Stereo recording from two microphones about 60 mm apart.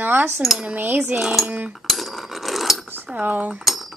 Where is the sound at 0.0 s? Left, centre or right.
Right.